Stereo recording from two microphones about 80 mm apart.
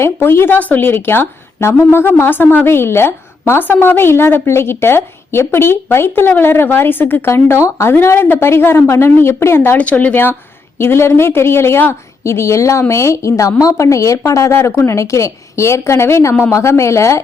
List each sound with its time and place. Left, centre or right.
0.0 s a woman's voice: left
9.7 s a woman's voice: centre; by 17.2 s left